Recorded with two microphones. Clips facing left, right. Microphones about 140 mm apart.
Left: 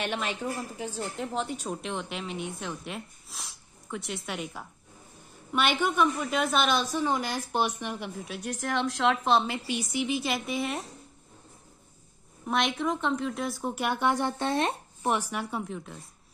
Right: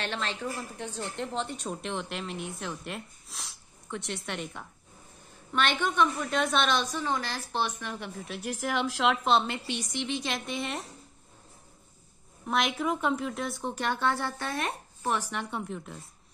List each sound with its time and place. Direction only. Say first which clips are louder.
0.0 s a woman's voice: left 2 dB; 15° left (ahead or behind)
8.3 s a woman's voice: right 1 dB; 5° right (ahead or behind)
12.4 s a woman's voice: left 1 dB; centre (ahead or behind); by 15.1 s 25° left (ahead or behind)
15.1 s a woman's voice: left 2 dB; 10° left (ahead or behind)